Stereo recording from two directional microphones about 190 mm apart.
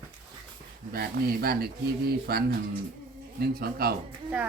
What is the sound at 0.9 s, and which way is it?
Speech, 55° right (ahead or behind).